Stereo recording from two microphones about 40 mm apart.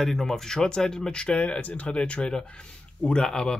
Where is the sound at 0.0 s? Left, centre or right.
Centre; by 1.6 s left.